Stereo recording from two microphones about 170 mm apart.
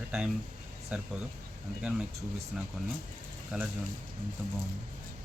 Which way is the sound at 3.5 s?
5° right (ahead or behind).